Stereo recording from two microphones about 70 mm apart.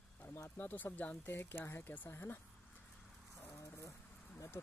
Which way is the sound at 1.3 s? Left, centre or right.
Left.